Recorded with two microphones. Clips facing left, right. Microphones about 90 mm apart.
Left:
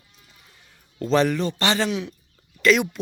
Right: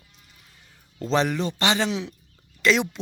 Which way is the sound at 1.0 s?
20° right (ahead or behind).